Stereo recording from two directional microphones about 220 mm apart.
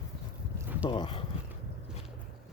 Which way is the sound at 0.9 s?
20° left (ahead or behind).